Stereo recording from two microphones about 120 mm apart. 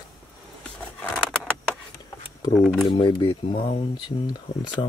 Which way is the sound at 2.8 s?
40° left (ahead or behind).